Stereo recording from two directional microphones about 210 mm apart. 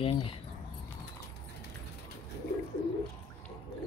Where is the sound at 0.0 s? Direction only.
25° left (ahead or behind).